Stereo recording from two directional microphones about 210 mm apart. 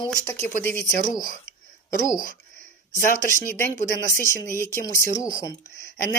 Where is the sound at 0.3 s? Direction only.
10° left (ahead or behind).